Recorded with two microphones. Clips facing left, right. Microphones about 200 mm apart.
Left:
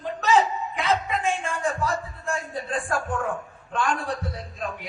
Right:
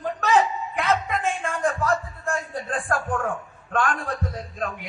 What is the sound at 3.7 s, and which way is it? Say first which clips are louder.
Music: right 2 dB; 55° right (ahead or behind).